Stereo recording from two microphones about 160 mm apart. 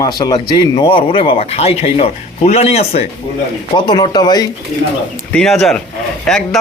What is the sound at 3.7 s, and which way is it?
Speech, 30° left (ahead or behind).